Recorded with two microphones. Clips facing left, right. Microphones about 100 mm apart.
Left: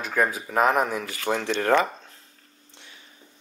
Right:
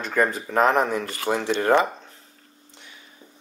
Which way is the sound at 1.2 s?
10° right (ahead or behind).